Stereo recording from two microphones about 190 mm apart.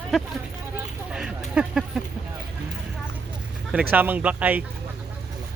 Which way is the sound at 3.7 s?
10° right (ahead or behind).